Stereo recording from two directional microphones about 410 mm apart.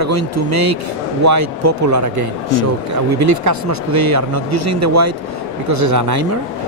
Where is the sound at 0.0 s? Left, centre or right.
Right.